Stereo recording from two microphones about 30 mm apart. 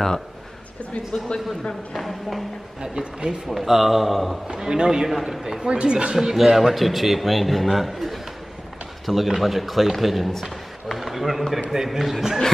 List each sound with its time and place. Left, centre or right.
1.3 s a man's voice: left
2.0 s a man's voice: centre
2.8 s speech: right
3.4 s a man's voice: centre
4.6 s a man's voice: right
5.0 s a man's voice: centre
5.6 s speech: right
6.1 s a man's voice: centre
6.7 s a man's voice: centre
11.7 s a man's voice: centre
12.0 s a man's voice: centre